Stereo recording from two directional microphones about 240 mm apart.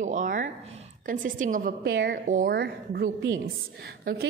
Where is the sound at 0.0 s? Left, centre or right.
Right.